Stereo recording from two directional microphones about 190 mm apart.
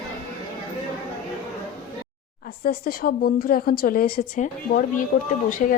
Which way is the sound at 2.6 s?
50° left (ahead or behind).